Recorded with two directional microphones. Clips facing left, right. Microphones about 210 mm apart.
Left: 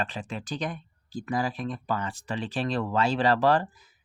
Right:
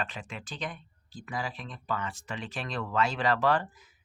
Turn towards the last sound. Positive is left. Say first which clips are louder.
# left 4 dB
turn(degrees=35)  # may be behind; listen again after turning